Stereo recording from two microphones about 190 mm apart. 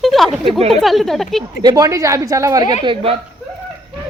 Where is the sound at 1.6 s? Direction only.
20° right (ahead or behind).